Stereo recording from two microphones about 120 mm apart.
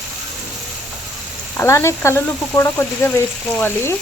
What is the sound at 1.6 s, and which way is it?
Speech, 20° left (ahead or behind).